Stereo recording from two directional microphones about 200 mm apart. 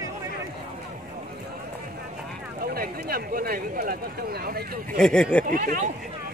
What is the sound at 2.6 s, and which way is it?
Speech, 45° right (ahead or behind).